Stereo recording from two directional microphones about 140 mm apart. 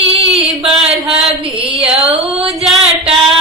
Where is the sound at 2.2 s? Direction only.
45° right (ahead or behind).